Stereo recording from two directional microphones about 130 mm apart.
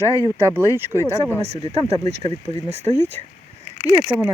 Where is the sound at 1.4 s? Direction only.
50° right (ahead or behind).